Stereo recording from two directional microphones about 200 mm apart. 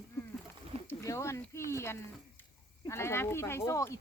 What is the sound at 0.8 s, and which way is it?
Speech, 15° left (ahead or behind).